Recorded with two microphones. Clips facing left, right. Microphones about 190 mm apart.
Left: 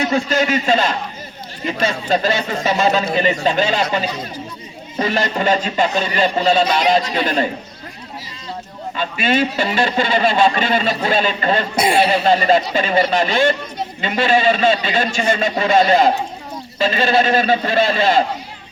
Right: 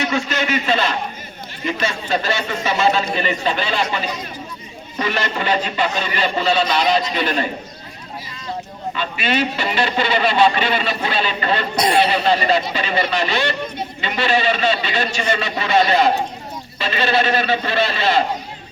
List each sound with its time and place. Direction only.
0.1 s speech: 35° left (ahead or behind)
0.3 s speech: 45° left (ahead or behind)
9.0 s speech: 50° left (ahead or behind)